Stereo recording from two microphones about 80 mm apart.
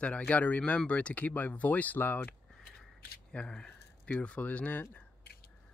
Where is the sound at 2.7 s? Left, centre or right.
Centre.